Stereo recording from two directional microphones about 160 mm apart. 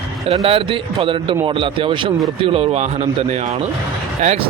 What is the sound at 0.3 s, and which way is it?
A man's voice, 35° right (ahead or behind).